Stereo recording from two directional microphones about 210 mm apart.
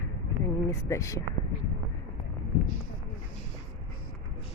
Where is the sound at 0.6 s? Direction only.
15° left (ahead or behind).